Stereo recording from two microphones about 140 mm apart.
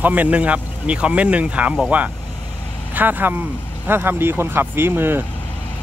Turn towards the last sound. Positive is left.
turn(degrees=-15)  # may be behind; listen again after turning